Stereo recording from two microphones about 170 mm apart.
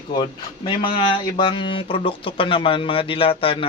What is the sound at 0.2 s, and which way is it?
Speech, 25° left (ahead or behind).